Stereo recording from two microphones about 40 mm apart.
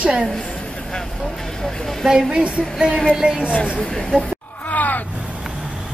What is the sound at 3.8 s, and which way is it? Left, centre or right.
Speech, centre.